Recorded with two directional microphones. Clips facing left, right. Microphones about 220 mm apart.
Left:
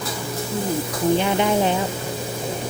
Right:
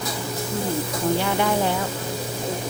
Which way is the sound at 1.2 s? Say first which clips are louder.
Left 3 dB; 20° left (ahead or behind).